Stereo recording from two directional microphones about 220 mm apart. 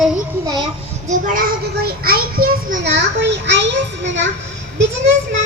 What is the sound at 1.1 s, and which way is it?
A child's voice, 40° right (ahead or behind).